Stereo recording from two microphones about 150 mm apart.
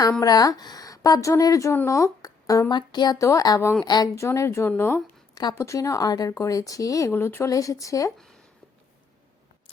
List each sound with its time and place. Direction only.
0.0 s a woman's voice: 25° left (ahead or behind)